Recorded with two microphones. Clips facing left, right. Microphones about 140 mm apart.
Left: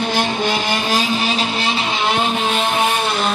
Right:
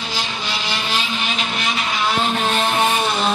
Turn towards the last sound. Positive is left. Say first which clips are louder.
# even
turn(degrees=0)  # may be behind; listen again after turning